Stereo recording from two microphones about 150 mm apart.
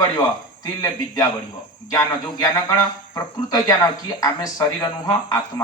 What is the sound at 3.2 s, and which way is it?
Speech, 25° left (ahead or behind).